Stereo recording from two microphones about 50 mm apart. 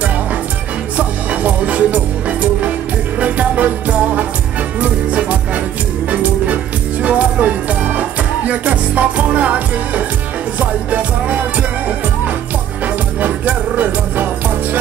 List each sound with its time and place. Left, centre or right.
0.9 s music: right
12.8 s music: right